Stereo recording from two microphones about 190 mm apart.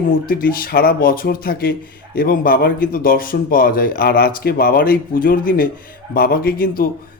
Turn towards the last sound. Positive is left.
turn(degrees=50)  # may be behind; listen again after turning